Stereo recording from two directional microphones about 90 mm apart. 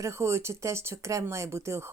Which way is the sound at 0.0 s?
30° right (ahead or behind).